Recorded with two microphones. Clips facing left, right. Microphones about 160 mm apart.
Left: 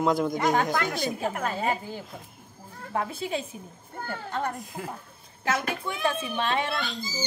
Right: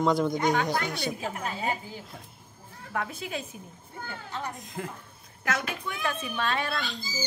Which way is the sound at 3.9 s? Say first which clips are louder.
Left 5 dB; 55° left (ahead or behind).